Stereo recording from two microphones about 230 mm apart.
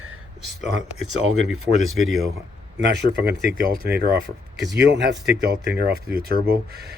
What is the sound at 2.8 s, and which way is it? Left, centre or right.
Speech, right.